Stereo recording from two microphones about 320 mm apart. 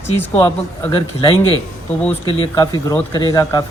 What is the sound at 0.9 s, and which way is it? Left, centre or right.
Speech, centre.